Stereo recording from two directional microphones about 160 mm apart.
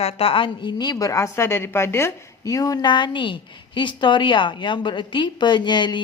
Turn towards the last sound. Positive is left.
turn(degrees=30)  # may be behind; listen again after turning